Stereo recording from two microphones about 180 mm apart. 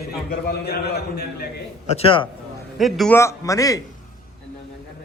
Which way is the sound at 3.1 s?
15° left (ahead or behind).